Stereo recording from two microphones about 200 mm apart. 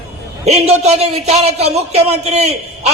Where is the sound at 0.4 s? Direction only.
30° right (ahead or behind).